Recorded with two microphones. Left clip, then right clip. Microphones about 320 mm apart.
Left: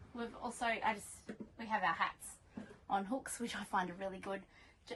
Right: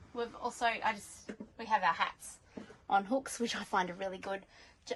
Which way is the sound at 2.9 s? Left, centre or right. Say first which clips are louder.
Right 7 dB; right.